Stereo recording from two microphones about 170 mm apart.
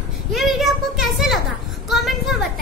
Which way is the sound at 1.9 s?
Centre (ahead or behind).